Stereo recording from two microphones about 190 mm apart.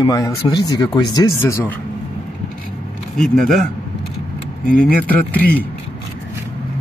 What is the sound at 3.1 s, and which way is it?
Speech, centre (ahead or behind).